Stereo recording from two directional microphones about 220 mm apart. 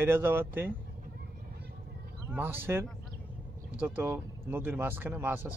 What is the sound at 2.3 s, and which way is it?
Speech, 10° right (ahead or behind).